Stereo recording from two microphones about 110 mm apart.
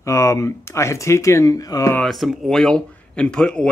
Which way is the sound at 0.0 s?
25° left (ahead or behind).